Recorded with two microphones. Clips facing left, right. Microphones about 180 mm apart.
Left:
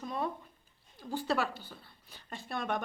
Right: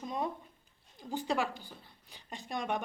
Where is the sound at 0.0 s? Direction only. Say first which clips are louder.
Even; 20° right (ahead or behind).